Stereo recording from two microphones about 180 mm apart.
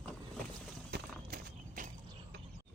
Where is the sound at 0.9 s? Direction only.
60° right (ahead or behind).